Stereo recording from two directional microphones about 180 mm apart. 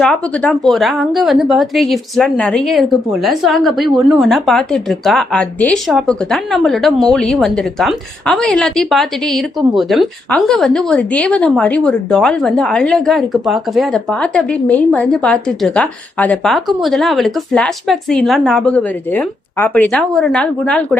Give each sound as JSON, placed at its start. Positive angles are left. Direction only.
{"t": 0.0, "sound": "a woman's voice", "side_deg": 5}